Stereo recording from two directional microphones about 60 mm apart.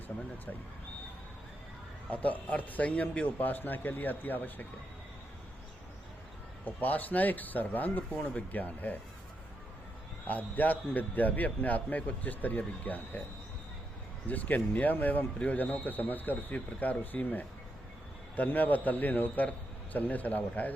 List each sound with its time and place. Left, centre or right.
2.0 s a man's voice: left
6.7 s a man's voice: left
10.2 s a man's voice: left
14.3 s a man's voice: left